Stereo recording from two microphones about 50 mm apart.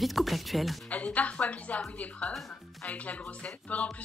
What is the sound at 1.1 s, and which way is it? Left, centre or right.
Speech, left.